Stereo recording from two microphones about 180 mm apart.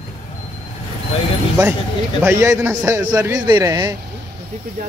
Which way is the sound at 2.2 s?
15° right (ahead or behind).